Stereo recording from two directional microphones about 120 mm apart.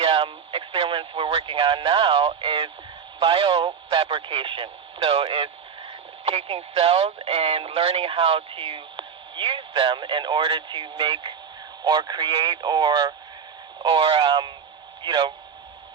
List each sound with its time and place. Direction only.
0.0 s radio: 50° right (ahead or behind)
3.2 s speech: 45° right (ahead or behind)
13.8 s speech: 45° right (ahead or behind)